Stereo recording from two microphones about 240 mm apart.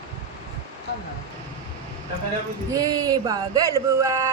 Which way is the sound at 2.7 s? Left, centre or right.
Centre.